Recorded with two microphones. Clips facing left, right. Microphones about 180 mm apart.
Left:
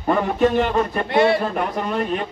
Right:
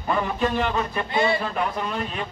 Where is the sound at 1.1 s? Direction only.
75° left (ahead or behind).